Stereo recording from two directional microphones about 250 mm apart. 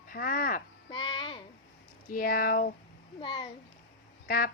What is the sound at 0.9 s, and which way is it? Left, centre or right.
Speech, centre.